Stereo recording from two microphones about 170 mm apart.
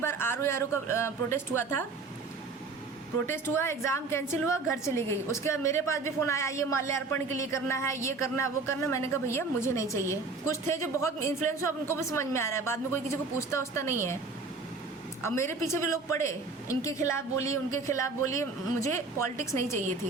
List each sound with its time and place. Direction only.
0.0 s speech: 15° left (ahead or behind)
3.2 s speech: 15° left (ahead or behind)
15.2 s speech: 15° left (ahead or behind)